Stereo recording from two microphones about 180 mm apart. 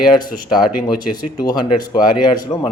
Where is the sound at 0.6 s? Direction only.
25° left (ahead or behind).